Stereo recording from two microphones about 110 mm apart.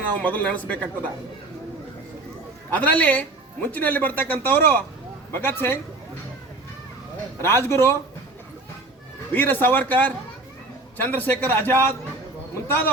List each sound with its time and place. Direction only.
0.2 s speech: 15° left (ahead or behind)
2.6 s a man's voice: 15° left (ahead or behind)
7.4 s a man's voice: 20° left (ahead or behind)
9.3 s speech: 20° left (ahead or behind)